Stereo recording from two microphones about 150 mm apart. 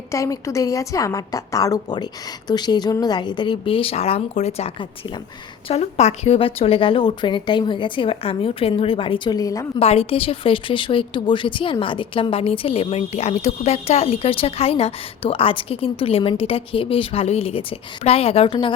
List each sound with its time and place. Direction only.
0.1 s a woman's voice: 20° left (ahead or behind)
5.6 s a woman's voice: 45° left (ahead or behind); by 9.6 s 25° left (ahead or behind)
9.7 s a woman's voice: 40° left (ahead or behind)